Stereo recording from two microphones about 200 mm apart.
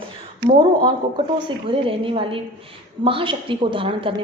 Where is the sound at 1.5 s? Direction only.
25° right (ahead or behind).